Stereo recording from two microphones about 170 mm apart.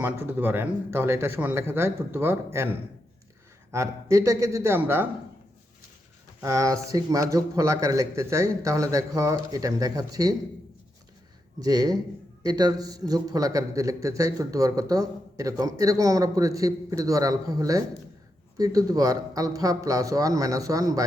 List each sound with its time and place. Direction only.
0.0 s speech: 10° right (ahead or behind)
6.4 s a man's voice: 20° right (ahead or behind)
11.6 s a man's voice: 20° right (ahead or behind)